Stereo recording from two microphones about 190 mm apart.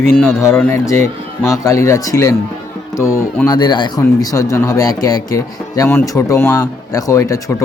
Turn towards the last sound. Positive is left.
turn(degrees=15)  # may be behind; listen again after turning